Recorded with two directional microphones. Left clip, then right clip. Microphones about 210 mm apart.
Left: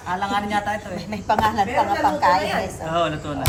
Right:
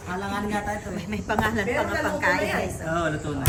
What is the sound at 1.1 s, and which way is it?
Speech, 25° left (ahead or behind).